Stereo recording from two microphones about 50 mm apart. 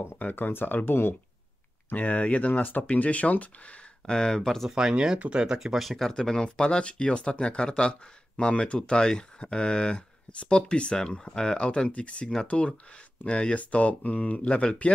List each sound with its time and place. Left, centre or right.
0.2 s speech: left
1.9 s speech: left
4.0 s speech: centre
4.6 s speech: centre
5.6 s speech: centre
5.9 s speech: centre